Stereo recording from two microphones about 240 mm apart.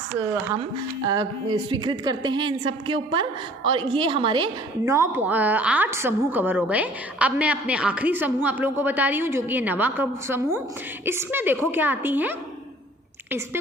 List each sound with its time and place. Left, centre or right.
1.0 s a woman's voice: centre